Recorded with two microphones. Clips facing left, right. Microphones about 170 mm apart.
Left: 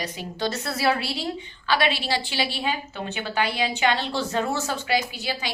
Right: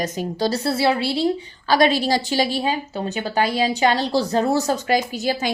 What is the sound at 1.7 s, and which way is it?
A woman's voice, 40° right (ahead or behind).